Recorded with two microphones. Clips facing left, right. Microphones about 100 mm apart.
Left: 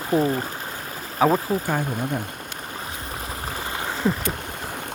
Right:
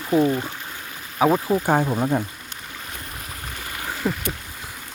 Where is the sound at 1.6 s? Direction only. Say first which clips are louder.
Right 5 dB; 50° right (ahead or behind).